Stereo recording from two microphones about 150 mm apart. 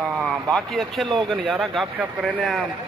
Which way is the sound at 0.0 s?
Centre (ahead or behind).